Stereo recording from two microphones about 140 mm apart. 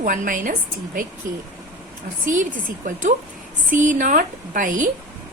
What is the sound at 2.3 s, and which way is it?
A woman's voice, 70° right (ahead or behind).